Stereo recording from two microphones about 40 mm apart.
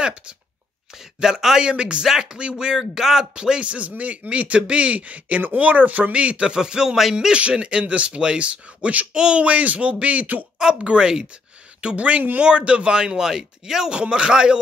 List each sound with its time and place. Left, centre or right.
0.0 s speech: right
0.9 s speech: centre
1.7 s speech: right
2.8 s speech: centre
3.6 s speech: right
6.1 s speech: right
6.5 s speech: centre
13.9 s speech: right